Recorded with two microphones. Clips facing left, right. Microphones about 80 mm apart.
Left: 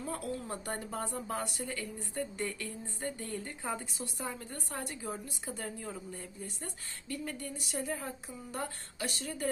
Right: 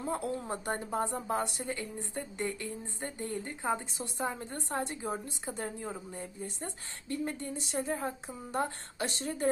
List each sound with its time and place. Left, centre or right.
0.0 s a woman's voice: right